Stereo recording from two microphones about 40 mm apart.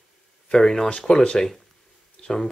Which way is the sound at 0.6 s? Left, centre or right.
Centre.